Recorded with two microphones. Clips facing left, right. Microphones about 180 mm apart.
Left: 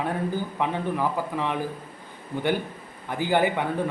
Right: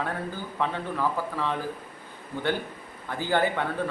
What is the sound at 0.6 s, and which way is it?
A man's voice, 15° left (ahead or behind).